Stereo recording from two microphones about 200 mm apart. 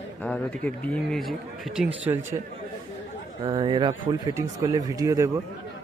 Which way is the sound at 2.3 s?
25° right (ahead or behind).